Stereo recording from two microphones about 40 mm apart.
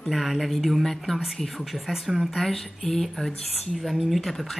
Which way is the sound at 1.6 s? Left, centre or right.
Centre.